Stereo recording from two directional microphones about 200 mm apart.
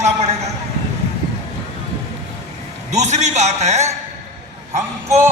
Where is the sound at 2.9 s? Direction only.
35° right (ahead or behind).